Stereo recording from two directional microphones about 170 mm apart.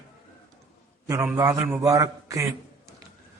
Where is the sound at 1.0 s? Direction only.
20° right (ahead or behind).